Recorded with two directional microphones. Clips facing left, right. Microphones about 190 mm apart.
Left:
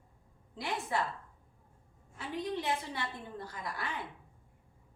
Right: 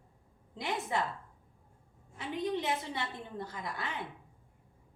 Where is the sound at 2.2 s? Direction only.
20° right (ahead or behind).